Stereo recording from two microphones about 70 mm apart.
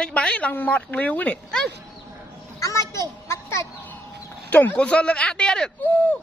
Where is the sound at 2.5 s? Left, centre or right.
Left.